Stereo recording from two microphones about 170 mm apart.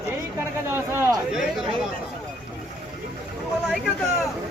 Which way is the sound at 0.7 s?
15° right (ahead or behind).